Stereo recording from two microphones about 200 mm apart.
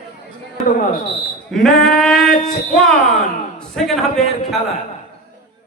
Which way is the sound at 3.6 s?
Centre (ahead or behind).